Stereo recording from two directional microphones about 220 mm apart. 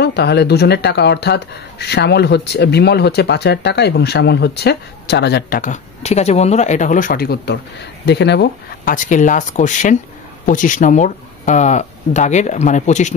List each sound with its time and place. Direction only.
0.0 s speech: 50° left (ahead or behind); by 13.1 s 35° left (ahead or behind)